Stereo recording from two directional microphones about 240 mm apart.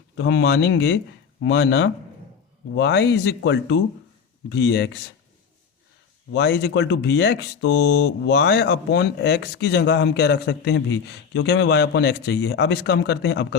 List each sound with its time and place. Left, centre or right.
0.2 s speech: left
6.3 s speech: left